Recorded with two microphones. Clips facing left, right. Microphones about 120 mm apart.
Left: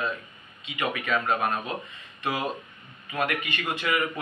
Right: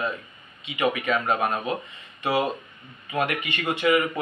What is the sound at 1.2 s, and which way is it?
Speech, 15° right (ahead or behind).